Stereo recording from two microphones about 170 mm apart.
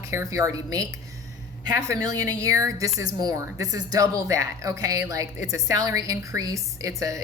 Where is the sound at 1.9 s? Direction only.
20° right (ahead or behind).